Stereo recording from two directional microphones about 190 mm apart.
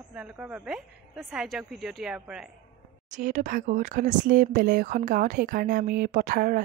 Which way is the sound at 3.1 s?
40° right (ahead or behind).